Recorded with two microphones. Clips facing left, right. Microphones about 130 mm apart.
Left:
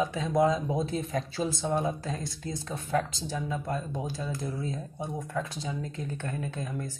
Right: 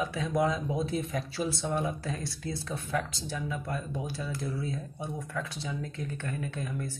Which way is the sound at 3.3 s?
35° left (ahead or behind).